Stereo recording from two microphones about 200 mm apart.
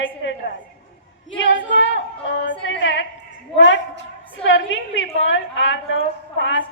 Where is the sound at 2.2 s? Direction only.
65° left (ahead or behind).